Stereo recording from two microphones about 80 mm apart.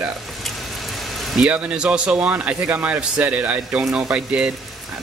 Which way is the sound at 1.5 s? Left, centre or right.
Centre.